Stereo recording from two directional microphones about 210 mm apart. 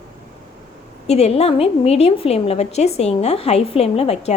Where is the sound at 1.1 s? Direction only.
30° left (ahead or behind).